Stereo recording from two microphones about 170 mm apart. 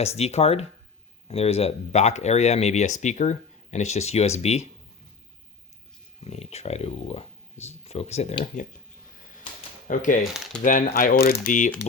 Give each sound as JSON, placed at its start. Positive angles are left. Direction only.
{"t": 0.0, "sound": "speech", "side_deg": 40}
{"t": 6.2, "sound": "speech", "side_deg": 40}
{"t": 9.8, "sound": "speech", "side_deg": 50}